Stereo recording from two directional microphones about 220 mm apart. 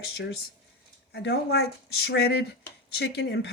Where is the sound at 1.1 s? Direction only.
50° left (ahead or behind).